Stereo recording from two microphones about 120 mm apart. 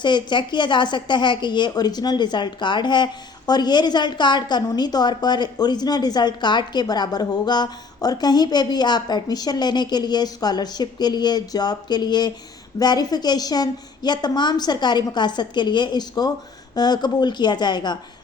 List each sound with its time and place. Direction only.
0.0 s a woman's voice: 40° left (ahead or behind)